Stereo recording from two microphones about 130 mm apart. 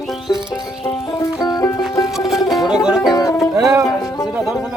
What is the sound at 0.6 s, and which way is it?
Music, 30° left (ahead or behind).